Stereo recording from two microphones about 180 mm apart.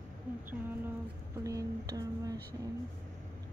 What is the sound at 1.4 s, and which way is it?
Speech, 20° right (ahead or behind).